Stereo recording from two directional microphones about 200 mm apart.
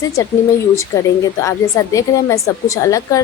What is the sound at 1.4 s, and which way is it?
Speech, 15° left (ahead or behind).